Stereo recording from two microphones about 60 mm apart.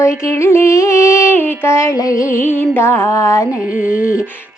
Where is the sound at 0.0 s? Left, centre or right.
Left.